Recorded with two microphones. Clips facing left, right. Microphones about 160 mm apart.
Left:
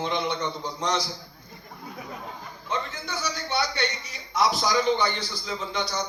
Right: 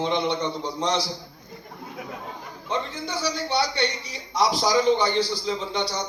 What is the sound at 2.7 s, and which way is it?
A man's voice, 30° right (ahead or behind).